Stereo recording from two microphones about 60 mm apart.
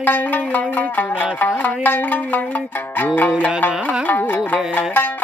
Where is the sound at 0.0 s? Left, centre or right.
Left.